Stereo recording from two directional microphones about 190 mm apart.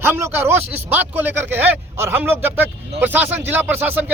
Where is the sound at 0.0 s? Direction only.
10° right (ahead or behind).